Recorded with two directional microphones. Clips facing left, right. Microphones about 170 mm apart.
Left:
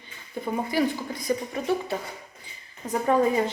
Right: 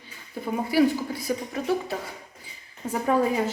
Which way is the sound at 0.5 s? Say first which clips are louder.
Right 4 dB; 10° right (ahead or behind).